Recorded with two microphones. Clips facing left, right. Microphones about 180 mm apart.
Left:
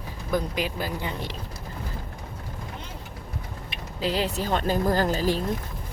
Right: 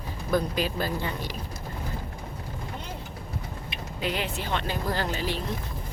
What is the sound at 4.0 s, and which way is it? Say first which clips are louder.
Speech: left 4 dB; 35° left (ahead or behind).